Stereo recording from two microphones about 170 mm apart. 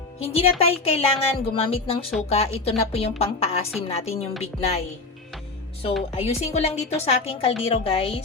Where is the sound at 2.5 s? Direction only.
35° left (ahead or behind).